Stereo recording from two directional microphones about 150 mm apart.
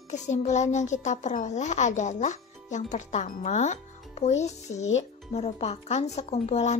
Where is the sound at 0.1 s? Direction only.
50° left (ahead or behind).